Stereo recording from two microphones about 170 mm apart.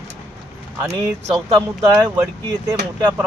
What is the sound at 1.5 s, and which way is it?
Speech, 20° right (ahead or behind).